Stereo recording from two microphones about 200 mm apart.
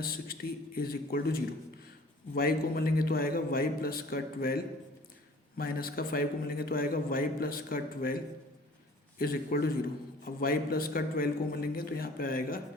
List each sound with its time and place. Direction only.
0.0 s a man's voice: 50° left (ahead or behind)